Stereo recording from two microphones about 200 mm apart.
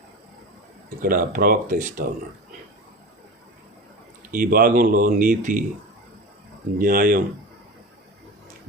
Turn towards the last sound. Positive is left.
turn(degrees=-45)  # may be behind; listen again after turning